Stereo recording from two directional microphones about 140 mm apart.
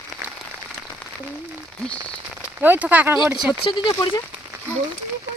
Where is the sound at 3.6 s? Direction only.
35° left (ahead or behind).